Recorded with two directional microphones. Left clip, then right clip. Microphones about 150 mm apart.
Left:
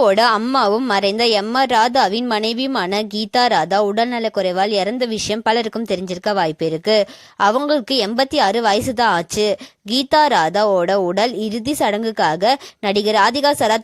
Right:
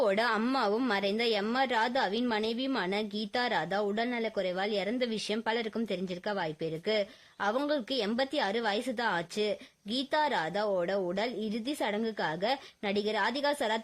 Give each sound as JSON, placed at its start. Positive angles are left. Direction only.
{"t": 0.0, "sound": "a woman's voice", "side_deg": 45}